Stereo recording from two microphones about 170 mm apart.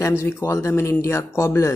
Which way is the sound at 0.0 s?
15° left (ahead or behind).